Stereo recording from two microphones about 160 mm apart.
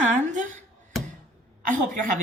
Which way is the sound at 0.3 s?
50° right (ahead or behind).